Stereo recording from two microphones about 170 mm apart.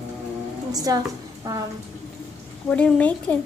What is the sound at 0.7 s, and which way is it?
Speech, 20° right (ahead or behind).